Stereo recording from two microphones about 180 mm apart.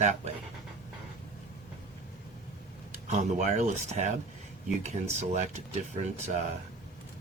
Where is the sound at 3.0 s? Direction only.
40° right (ahead or behind).